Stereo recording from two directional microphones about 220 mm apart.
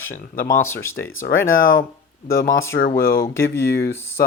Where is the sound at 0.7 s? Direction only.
10° left (ahead or behind).